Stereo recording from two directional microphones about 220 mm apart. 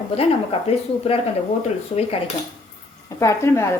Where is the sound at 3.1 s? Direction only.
15° left (ahead or behind).